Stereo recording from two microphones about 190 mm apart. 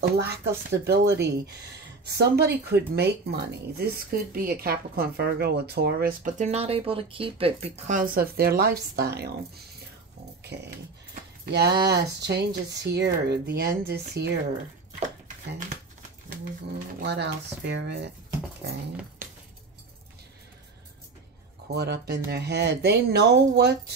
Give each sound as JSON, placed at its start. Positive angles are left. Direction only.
{"t": 0.0, "sound": "speech", "side_deg": -60}
{"t": 10.4, "sound": "dog", "side_deg": -65}
{"t": 11.4, "sound": "speech", "side_deg": -55}
{"t": 15.0, "sound": "speech", "side_deg": -40}
{"t": 16.3, "sound": "speech", "side_deg": -55}
{"t": 21.7, "sound": "speech", "side_deg": -60}